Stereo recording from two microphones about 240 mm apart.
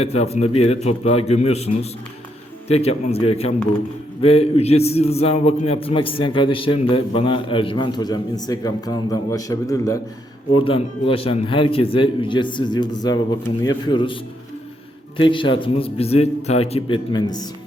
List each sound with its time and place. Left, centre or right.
0.0 s a man's voice: left
15.2 s a man's voice: left